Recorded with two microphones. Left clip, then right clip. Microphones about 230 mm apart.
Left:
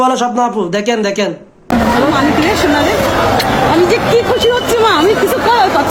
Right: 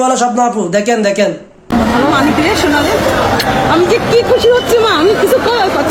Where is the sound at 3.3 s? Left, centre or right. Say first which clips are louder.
Even; centre.